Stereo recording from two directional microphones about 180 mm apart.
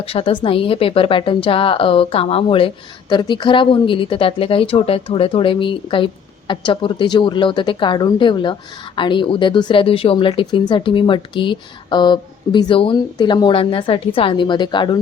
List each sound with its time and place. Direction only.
0.0 s a woman's voice: 30° left (ahead or behind)